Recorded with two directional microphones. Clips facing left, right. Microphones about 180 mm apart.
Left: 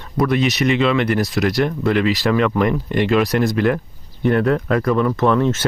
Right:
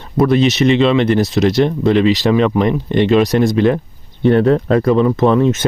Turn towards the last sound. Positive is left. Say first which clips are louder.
# right 4 dB
turn(degrees=-15)  # may be behind; listen again after turning